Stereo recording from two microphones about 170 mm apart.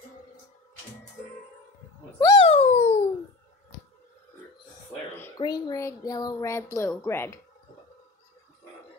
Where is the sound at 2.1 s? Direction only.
20° left (ahead or behind).